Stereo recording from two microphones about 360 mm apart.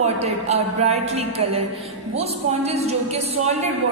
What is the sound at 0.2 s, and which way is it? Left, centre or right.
A woman's voice, centre.